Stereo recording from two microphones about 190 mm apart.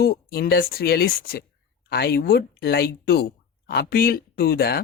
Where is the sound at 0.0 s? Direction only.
55° left (ahead or behind).